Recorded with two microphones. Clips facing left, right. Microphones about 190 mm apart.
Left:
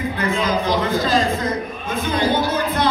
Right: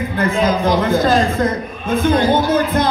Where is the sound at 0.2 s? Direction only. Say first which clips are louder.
Right 6 dB; 50° right (ahead or behind).